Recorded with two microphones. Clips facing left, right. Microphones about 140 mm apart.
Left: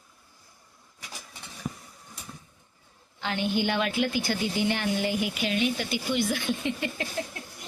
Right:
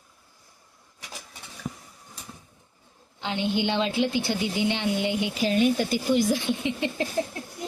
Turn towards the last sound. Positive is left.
turn(degrees=-30)  # may be behind; listen again after turning